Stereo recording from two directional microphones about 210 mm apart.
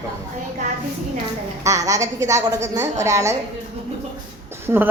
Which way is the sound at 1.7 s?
15° right (ahead or behind).